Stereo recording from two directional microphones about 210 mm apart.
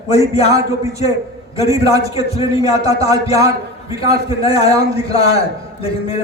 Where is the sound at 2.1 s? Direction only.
30° left (ahead or behind).